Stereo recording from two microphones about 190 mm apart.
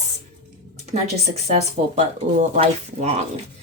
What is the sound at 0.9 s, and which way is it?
Speech, 35° right (ahead or behind).